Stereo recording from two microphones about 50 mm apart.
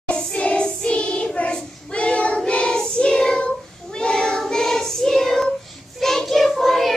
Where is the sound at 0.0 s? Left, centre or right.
Left.